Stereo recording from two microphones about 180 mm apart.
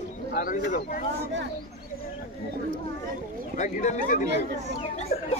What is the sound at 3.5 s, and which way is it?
Speech, 40° left (ahead or behind).